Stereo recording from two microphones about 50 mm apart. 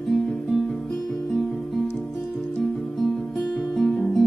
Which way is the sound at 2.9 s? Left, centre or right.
Centre.